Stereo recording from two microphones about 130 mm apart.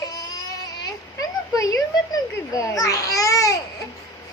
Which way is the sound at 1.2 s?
25° left (ahead or behind).